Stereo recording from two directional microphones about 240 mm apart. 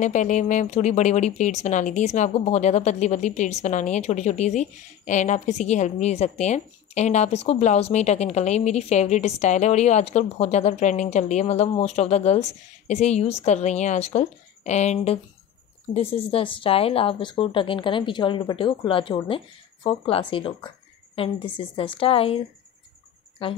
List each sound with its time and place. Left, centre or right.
0.0 s speech: left
23.4 s speech: left